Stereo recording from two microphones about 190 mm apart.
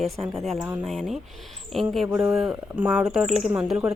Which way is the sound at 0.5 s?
15° right (ahead or behind).